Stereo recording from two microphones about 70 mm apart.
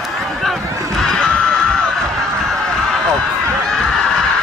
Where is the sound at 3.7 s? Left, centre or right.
Centre.